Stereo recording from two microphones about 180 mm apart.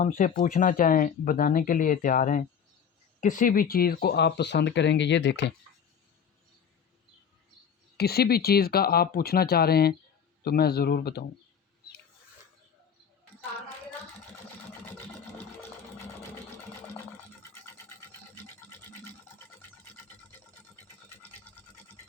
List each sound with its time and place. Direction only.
0.0 s speech: 45° left (ahead or behind); by 5.5 s 75° left (ahead or behind)
7.9 s speech: 60° left (ahead or behind)
21.2 s toothbrush: 10° left (ahead or behind)